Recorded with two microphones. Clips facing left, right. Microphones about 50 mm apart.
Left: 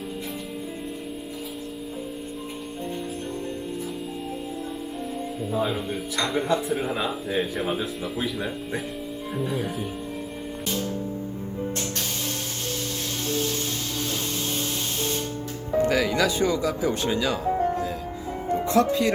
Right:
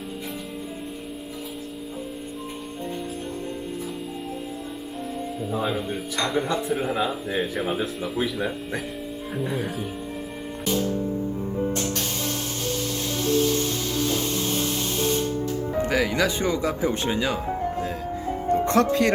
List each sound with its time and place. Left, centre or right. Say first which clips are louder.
5.4 s speech: even; centre
15.9 s speech: right 2 dB; right
18.7 s speech: even; right